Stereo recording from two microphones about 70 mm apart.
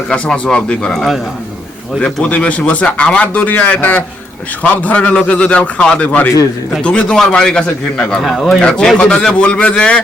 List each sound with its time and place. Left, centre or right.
0.1 s speech: centre
0.9 s speech: centre
2.0 s speech: centre
8.2 s speech: centre
8.6 s speech: centre